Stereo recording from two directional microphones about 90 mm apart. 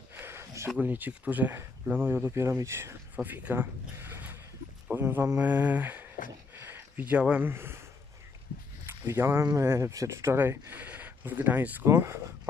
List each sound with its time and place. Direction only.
0.1 s a sound: 25° right (ahead or behind)
0.7 s speech: 20° right (ahead or behind)
6.5 s a sound: 25° right (ahead or behind)
7.4 s speech: 25° right (ahead or behind)
8.8 s speech: 25° right (ahead or behind)
11.9 s speech: 30° right (ahead or behind)